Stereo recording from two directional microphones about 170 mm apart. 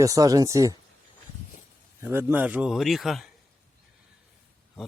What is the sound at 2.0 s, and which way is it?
Speech, 15° right (ahead or behind).